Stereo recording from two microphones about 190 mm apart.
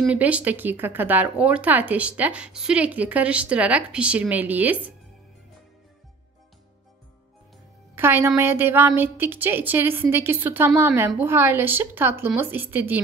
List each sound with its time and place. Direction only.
0.0 s speech: 10° right (ahead or behind)
7.9 s speech: 10° right (ahead or behind)